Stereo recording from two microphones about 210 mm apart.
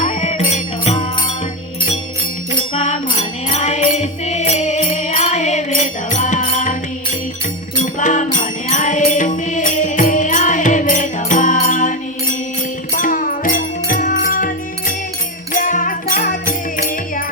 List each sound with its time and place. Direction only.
0.0 s music: 30° left (ahead or behind)
2.6 s music: 30° left (ahead or behind)
7.8 s music: 35° left (ahead or behind)